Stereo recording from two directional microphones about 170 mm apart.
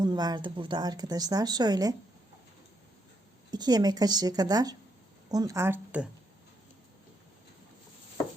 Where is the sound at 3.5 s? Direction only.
25° right (ahead or behind).